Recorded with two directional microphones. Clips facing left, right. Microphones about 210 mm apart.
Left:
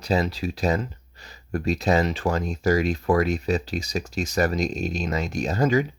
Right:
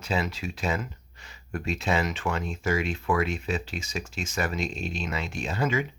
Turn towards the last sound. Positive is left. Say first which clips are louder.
# left 6 dB
turn(degrees=40)  # may be behind; listen again after turning